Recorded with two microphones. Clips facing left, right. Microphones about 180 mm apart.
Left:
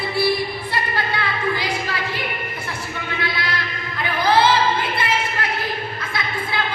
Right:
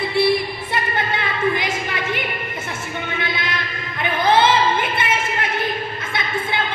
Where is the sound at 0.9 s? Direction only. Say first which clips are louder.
Right 1 dB; 20° right (ahead or behind).